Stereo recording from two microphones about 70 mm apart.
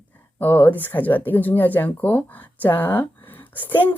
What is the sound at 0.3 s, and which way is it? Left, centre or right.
A woman's voice, left.